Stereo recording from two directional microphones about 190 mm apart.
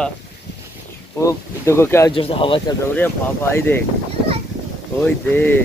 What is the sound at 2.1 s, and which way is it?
Speech, 30° left (ahead or behind).